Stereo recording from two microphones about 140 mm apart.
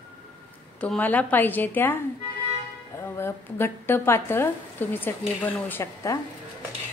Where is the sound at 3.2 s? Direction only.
15° left (ahead or behind).